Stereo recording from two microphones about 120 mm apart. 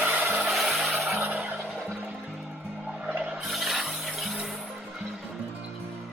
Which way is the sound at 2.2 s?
Centre (ahead or behind).